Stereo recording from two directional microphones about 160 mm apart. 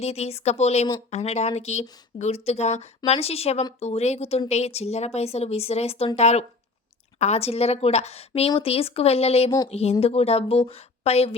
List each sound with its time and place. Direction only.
0.0 s a woman's voice: 40° left (ahead or behind)